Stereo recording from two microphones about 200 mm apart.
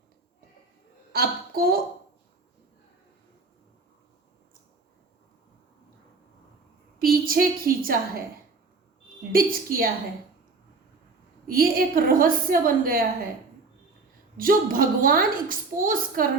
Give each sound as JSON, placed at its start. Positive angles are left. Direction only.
{"t": 1.1, "sound": "speech", "side_deg": -50}
{"t": 7.0, "sound": "a woman's voice", "side_deg": -45}
{"t": 9.3, "sound": "a woman's voice", "side_deg": -45}
{"t": 11.4, "sound": "a woman's voice", "side_deg": -45}
{"t": 14.3, "sound": "a woman's voice", "side_deg": -45}